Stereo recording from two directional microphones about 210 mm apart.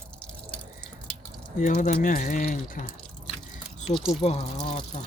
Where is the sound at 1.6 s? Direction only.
35° left (ahead or behind).